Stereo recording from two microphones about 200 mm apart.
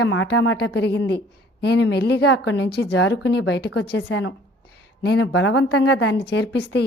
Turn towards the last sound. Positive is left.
turn(degrees=60)  # may be behind; listen again after turning